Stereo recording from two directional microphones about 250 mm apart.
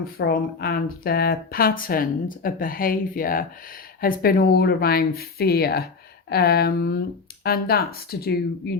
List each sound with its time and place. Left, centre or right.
0.0 s speech: left